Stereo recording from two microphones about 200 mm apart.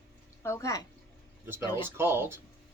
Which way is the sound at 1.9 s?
10° right (ahead or behind).